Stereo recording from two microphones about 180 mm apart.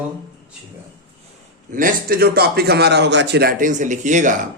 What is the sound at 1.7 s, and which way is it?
A man's voice, 50° right (ahead or behind).